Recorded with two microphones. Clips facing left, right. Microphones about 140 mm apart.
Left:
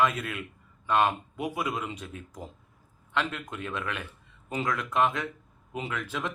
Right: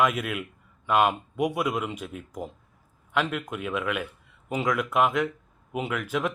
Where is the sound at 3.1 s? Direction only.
5° right (ahead or behind).